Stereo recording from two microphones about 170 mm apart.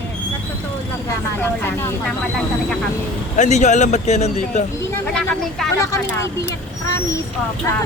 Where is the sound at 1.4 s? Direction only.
15° left (ahead or behind).